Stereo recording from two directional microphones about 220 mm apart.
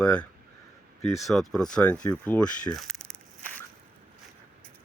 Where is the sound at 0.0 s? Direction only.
5° left (ahead or behind).